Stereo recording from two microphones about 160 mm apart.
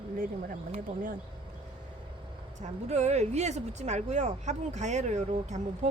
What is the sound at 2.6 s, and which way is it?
Speech, 45° right (ahead or behind).